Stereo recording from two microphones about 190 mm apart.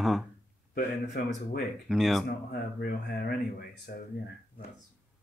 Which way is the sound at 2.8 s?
55° left (ahead or behind).